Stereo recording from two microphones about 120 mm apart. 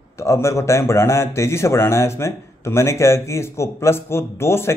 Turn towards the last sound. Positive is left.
turn(degrees=20)  # may be behind; listen again after turning